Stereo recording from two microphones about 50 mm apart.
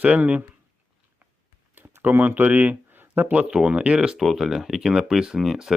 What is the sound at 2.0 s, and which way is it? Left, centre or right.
Speech, right.